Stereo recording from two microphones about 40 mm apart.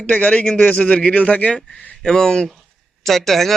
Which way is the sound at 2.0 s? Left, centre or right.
Centre.